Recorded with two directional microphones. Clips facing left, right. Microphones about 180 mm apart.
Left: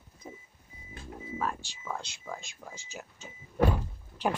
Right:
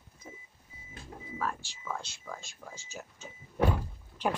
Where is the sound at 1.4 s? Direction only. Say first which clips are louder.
Left 1 dB; 15° left (ahead or behind).